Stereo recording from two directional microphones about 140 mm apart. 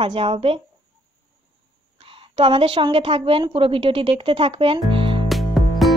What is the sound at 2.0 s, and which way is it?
A woman's voice, 35° right (ahead or behind).